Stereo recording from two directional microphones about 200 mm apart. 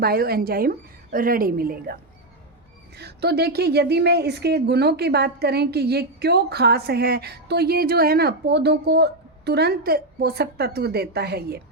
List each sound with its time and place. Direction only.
0.0 s speech: 50° right (ahead or behind)